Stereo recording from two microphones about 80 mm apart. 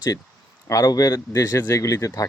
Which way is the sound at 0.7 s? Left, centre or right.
Left.